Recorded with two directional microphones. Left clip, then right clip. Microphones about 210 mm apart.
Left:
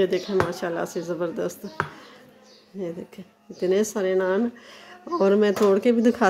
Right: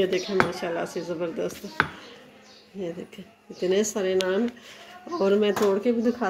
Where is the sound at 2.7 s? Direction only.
10° left (ahead or behind).